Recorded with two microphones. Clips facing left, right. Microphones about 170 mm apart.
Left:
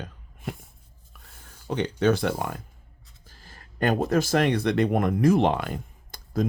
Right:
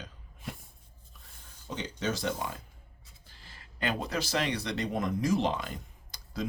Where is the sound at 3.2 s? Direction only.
45° left (ahead or behind).